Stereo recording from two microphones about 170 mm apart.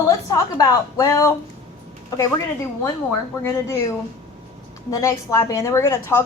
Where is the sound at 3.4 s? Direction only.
15° left (ahead or behind).